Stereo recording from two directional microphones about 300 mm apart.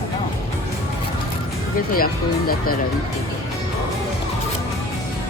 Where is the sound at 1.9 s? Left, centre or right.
Left.